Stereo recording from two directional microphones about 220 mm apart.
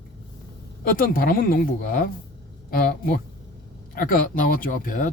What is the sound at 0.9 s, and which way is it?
Speech, 40° left (ahead or behind).